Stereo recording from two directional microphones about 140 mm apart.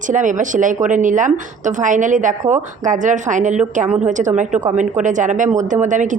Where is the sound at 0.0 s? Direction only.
65° right (ahead or behind).